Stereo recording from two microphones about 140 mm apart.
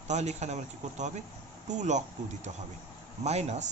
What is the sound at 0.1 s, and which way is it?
A man's voice, 55° right (ahead or behind).